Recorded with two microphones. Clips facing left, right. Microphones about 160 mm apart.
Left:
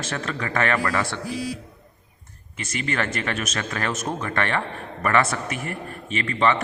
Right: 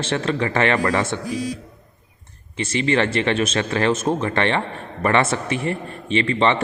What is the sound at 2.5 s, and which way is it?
A man's voice, 30° right (ahead or behind).